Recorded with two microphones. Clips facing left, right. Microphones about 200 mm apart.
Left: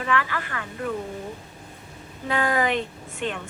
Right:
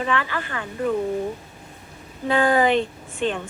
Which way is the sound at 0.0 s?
30° right (ahead or behind).